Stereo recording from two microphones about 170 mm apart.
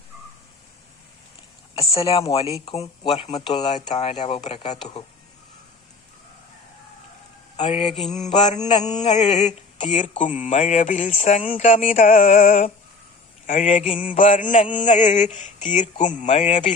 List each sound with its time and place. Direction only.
1.7 s speech: 35° left (ahead or behind)
7.5 s speech: 40° left (ahead or behind)
8.1 s mantra: 45° left (ahead or behind)
13.5 s mantra: 40° left (ahead or behind)